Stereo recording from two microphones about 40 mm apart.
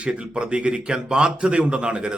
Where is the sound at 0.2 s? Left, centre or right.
Right.